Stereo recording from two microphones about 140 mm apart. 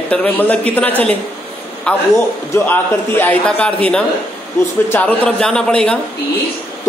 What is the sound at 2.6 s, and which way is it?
A man's voice, 15° left (ahead or behind).